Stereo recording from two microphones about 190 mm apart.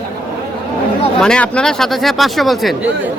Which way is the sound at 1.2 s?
5° left (ahead or behind).